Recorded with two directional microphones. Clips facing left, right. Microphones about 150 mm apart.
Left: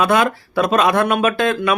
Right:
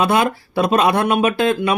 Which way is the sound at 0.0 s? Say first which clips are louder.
Left 1 dB; 30° right (ahead or behind).